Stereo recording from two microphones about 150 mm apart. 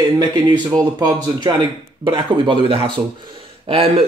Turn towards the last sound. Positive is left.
turn(degrees=-40)  # may be behind; listen again after turning